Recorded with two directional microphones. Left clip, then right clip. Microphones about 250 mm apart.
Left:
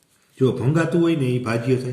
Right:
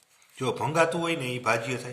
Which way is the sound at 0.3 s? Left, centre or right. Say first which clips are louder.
Left 4 dB; right.